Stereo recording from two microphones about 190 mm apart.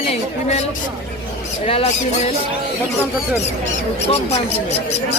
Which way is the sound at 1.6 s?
30° left (ahead or behind).